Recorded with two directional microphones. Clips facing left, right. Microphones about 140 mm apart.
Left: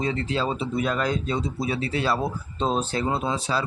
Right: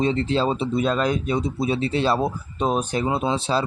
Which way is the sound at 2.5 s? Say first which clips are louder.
Right 2 dB; 15° right (ahead or behind).